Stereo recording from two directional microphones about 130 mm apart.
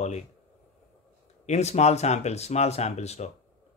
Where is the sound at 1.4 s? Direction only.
60° left (ahead or behind).